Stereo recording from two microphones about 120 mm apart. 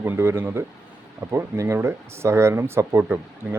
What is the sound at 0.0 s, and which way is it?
Speech, 20° right (ahead or behind).